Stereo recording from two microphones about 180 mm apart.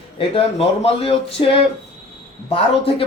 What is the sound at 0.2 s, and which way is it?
A man's voice, 30° left (ahead or behind).